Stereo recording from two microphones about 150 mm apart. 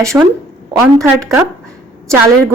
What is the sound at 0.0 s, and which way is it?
A woman's voice, 20° right (ahead or behind).